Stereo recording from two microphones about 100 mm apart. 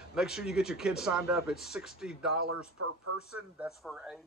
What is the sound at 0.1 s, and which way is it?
Speech, 5° right (ahead or behind).